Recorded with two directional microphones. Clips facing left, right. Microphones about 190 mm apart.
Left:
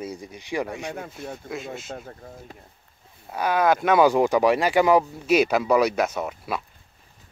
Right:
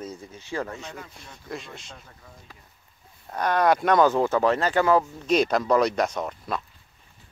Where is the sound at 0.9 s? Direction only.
55° left (ahead or behind).